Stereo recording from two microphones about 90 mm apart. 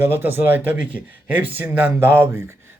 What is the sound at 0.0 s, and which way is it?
A man's voice, 25° right (ahead or behind).